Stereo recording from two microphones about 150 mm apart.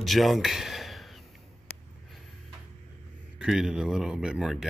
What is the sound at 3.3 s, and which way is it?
Speech, 5° right (ahead or behind).